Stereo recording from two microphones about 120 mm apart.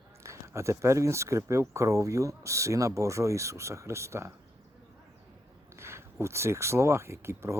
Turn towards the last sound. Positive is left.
turn(degrees=-20)  # may be behind; listen again after turning